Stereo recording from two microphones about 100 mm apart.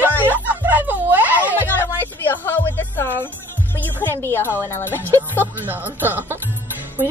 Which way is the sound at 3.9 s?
20° left (ahead or behind).